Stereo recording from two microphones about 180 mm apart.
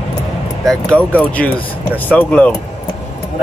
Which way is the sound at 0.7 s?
5° left (ahead or behind).